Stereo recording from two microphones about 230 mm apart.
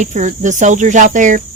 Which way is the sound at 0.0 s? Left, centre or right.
Right.